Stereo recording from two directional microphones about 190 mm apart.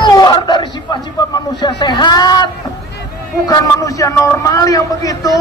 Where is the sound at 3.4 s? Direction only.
20° left (ahead or behind).